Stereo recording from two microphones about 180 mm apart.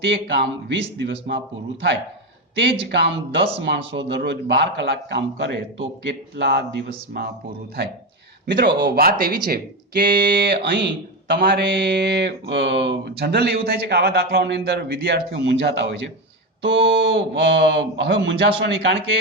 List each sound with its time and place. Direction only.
0.0 s speech: 80° right
2.6 s speech: 70° right (ahead or behind)
8.4 s speech: 70° right (ahead or behind)
11.3 s speech: 60° right (ahead or behind)
16.6 s speech: 90° right